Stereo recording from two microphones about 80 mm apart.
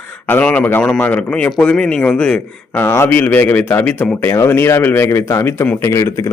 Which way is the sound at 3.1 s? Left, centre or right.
Left.